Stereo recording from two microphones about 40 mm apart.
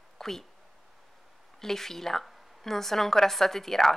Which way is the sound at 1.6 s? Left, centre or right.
Centre.